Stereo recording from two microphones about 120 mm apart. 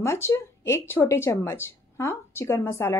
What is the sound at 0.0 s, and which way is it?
A woman's voice, 20° left (ahead or behind).